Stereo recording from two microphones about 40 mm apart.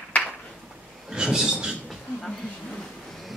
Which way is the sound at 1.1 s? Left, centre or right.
Centre.